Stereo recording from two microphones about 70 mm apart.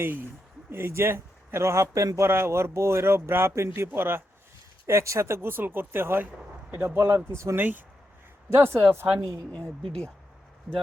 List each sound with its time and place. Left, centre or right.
0.7 s speech: right
2.2 s speech: right
7.6 s speech: right
8.4 s speech: right
9.5 s speech: centre
10.7 s speech: centre